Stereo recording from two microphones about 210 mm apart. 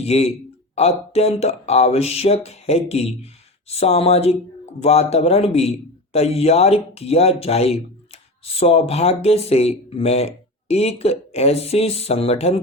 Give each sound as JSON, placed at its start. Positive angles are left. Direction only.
{"t": 0.0, "sound": "speech", "side_deg": 30}